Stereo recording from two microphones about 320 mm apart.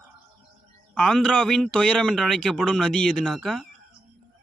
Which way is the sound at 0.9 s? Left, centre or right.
Centre.